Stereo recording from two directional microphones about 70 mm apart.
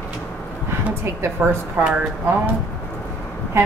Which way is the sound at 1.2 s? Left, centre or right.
Right.